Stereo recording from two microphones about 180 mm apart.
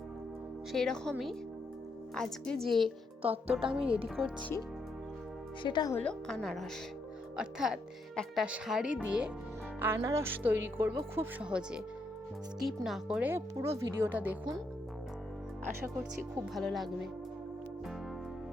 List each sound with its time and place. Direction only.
0.7 s speech: 5° left (ahead or behind)
2.1 s speech: 5° left (ahead or behind)
2.6 s a woman's voice: 25° right (ahead or behind)
4.2 s speech: 10° left (ahead or behind)
5.6 s speech: 25° left (ahead or behind)
5.9 s speech: 5° left (ahead or behind); by 14.3 s 10° right (ahead or behind)
16.6 s speech: centre (ahead or behind)